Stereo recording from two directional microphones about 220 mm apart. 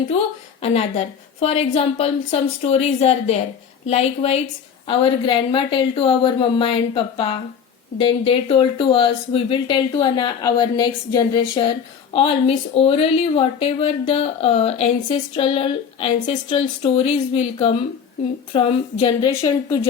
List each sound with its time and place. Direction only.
0.6 s speech: 30° left (ahead or behind)